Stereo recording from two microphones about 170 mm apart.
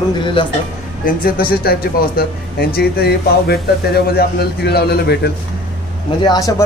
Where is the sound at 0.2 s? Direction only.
30° left (ahead or behind).